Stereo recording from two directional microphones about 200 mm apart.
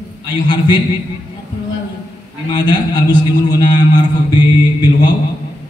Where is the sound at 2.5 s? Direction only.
20° left (ahead or behind).